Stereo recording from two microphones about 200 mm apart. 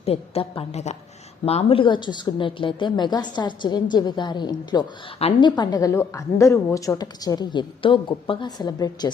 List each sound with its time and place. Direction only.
0.0 s a woman's voice: 30° left (ahead or behind)